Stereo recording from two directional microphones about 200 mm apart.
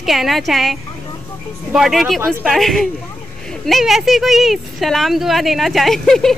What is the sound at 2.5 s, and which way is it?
Speech, centre (ahead or behind).